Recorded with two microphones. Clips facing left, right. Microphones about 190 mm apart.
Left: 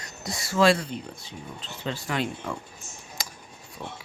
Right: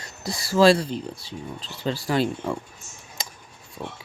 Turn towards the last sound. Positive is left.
turn(degrees=-25)  # may be behind; listen again after turning